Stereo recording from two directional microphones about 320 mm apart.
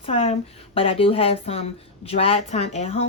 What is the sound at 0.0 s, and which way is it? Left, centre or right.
Speech, centre.